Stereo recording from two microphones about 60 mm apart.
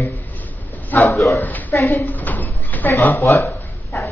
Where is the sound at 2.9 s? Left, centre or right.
Left.